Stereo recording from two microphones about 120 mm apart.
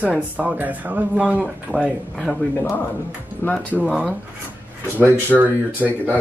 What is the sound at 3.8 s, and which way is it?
Speech, 5° right (ahead or behind).